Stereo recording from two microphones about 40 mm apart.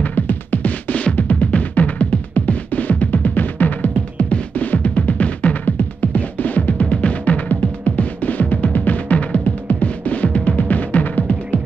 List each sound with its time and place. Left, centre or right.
0.0 s music: left
5.7 s music: left